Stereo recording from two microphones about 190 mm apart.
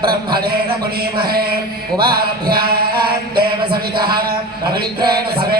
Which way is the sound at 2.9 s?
25° right (ahead or behind).